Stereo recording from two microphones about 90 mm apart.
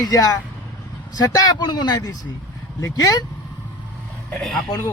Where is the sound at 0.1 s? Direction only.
45° left (ahead or behind).